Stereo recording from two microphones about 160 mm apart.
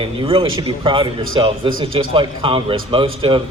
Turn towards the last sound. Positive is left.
turn(degrees=-30)  # may be behind; listen again after turning